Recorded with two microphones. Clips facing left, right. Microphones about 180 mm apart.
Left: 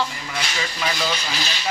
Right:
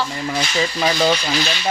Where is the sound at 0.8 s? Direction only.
40° right (ahead or behind).